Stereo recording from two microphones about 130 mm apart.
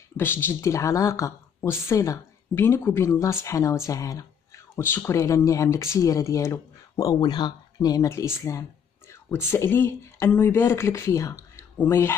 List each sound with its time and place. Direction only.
0.2 s speech: 15° left (ahead or behind)